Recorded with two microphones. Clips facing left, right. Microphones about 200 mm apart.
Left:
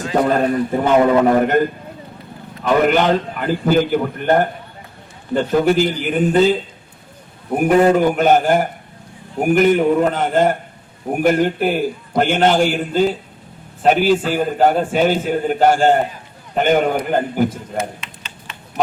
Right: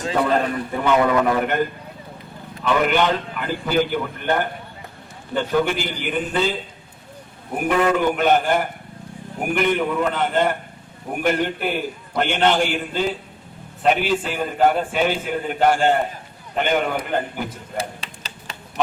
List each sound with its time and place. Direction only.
0.1 s a man's voice: 40° left (ahead or behind)
2.6 s a man's voice: 40° left (ahead or behind)
7.6 s a man's voice: 40° left (ahead or behind)
14.3 s a man's voice: 40° left (ahead or behind)
17.7 s a sound: 35° right (ahead or behind)